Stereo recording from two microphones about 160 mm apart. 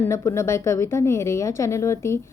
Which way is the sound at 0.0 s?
20° left (ahead or behind).